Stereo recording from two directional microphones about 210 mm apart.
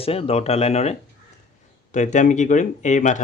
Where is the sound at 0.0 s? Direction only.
30° left (ahead or behind).